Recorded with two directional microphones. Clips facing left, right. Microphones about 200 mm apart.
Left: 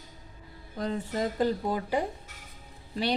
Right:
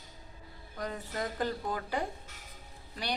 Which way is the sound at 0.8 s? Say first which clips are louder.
Left 6 dB; 25° left (ahead or behind).